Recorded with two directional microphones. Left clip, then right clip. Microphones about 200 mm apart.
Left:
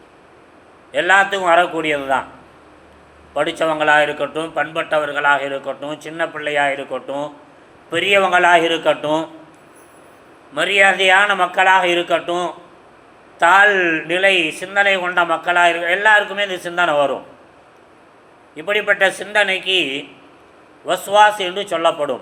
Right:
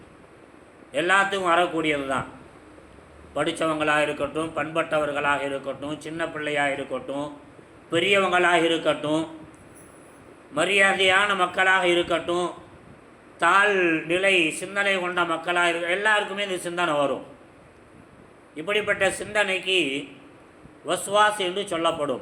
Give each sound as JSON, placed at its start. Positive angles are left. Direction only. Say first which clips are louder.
{"t": 0.9, "sound": "a man's voice", "louder": "left 7 dB", "side_deg": -15}
{"t": 3.3, "sound": "a man's voice", "louder": "left 7 dB", "side_deg": -20}
{"t": 10.5, "sound": "a man's voice", "louder": "left 6 dB", "side_deg": -20}
{"t": 18.5, "sound": "a man's voice", "louder": "left 7 dB", "side_deg": -20}